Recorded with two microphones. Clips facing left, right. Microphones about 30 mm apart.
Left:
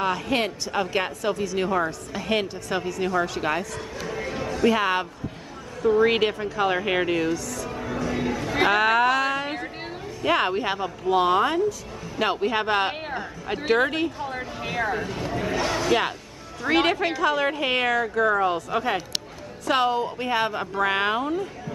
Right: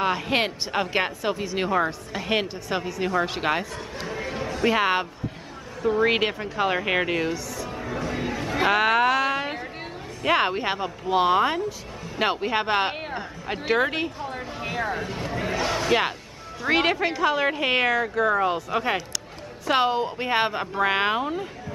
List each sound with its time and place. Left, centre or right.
0.0 s a woman's voice: right
3.3 s a woman's voice: right
4.1 s music: centre
5.8 s a woman's voice: centre
14.2 s a sound: centre
15.5 s a woman's voice: centre; by 20.6 s right
20.7 s speech: centre